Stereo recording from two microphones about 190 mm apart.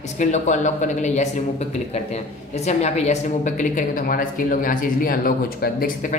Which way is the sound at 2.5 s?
35° left (ahead or behind).